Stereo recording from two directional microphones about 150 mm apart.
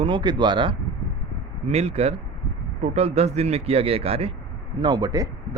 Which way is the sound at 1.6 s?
45° right (ahead or behind).